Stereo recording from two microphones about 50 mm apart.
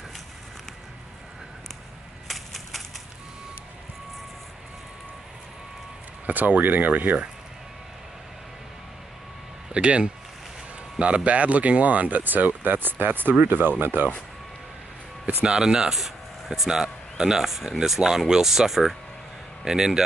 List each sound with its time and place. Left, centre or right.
2.2 s a sound: centre
6.2 s speech: right
9.7 s speech: right
15.4 s speech: centre
15.9 s speech: centre